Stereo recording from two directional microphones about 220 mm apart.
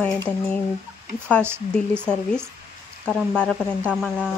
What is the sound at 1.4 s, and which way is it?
Speech, 10° right (ahead or behind).